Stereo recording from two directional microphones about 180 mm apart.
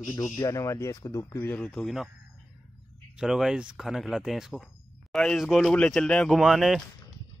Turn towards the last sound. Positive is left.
turn(degrees=0)  # may be behind; listen again after turning